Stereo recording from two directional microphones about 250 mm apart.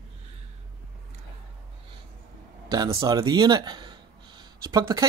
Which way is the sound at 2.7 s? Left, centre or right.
Centre.